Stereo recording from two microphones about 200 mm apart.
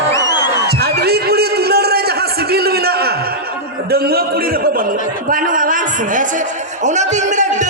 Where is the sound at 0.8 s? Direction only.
50° right (ahead or behind).